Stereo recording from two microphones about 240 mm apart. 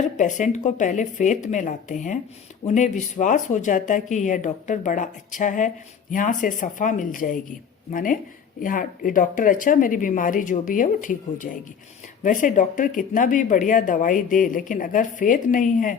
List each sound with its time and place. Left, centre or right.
0.2 s speech: left